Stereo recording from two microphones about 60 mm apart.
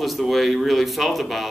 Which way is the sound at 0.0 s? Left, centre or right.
Centre.